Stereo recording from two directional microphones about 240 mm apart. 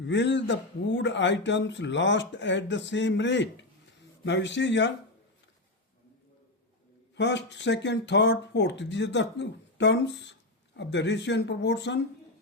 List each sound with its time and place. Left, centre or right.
0.0 s a man's voice: left
7.2 s a man's voice: left